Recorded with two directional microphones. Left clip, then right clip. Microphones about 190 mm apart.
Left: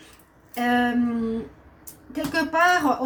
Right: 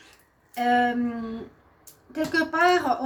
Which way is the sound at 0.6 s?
45° right (ahead or behind).